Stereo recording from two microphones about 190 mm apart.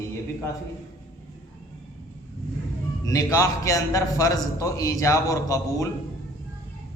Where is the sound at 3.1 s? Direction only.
15° left (ahead or behind).